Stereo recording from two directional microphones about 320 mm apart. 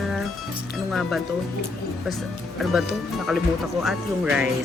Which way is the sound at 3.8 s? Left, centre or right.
Centre.